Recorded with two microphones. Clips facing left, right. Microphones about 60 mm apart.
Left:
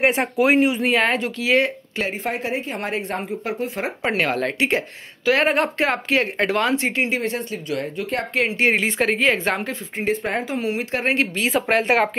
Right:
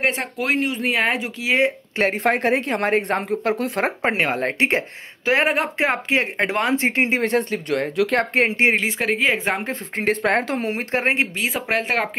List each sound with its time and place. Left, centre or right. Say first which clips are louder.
0.0 s speech: left 5 dB; centre
0.8 s speech: left 2 dB; centre
2.0 s speech: right 6 dB; right
4.0 s speech: left 3 dB; right
5.4 s speech: left 1 dB; centre
5.8 s speech: even; centre
6.8 s speech: right 2 dB; right
7.2 s speech: right 5 dB; right
7.9 s speech: right 6 dB; right
8.4 s speech: even; right
8.7 s speech: left 1 dB; centre
9.9 s speech: right 3 dB; right
10.7 s speech: even; right
11.3 s speech: left 3 dB; centre